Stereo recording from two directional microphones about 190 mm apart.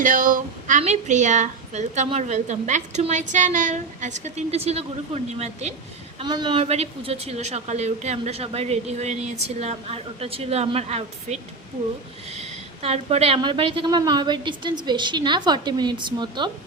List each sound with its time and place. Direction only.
0.0 s a woman's voice: 40° right (ahead or behind)
6.1 s a woman's voice: 25° right (ahead or behind)